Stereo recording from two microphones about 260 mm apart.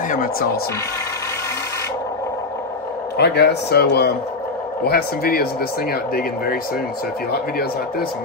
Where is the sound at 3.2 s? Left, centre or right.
Left.